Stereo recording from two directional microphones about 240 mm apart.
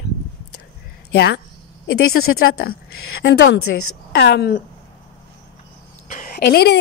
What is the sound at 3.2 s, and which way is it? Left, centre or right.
A woman's voice, left.